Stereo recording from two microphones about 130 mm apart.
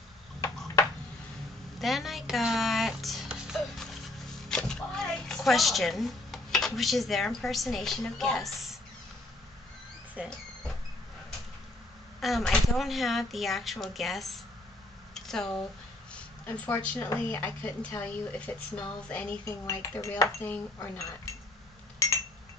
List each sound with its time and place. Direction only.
1.8 s music: centre (ahead or behind)
4.5 s speech: 5° left (ahead or behind)
10.2 s speech: 10° right (ahead or behind)
12.2 s speech: centre (ahead or behind)
15.1 s a sound: 5° left (ahead or behind)
16.1 s a woman's voice: 10° left (ahead or behind)
19.4 s speech: 20° left (ahead or behind)